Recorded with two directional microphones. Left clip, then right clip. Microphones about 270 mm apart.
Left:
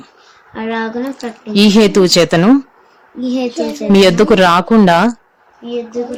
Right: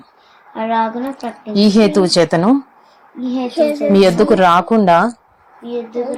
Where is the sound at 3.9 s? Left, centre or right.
Centre.